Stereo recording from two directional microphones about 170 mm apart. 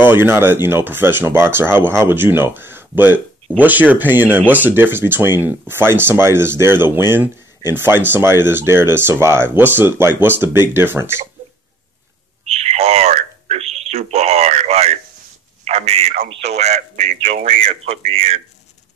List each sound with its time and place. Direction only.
0.0 s speech: 10° right (ahead or behind)
12.4 s a sound: 40° right (ahead or behind)
16.3 s speech: 40° right (ahead or behind)